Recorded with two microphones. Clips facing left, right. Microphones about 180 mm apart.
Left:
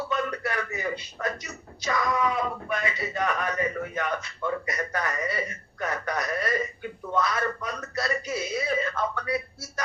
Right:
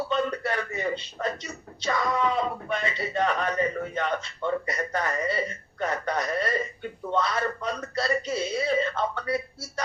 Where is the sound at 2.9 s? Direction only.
25° right (ahead or behind).